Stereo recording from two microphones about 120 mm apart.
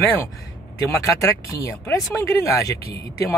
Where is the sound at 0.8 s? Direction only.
20° left (ahead or behind).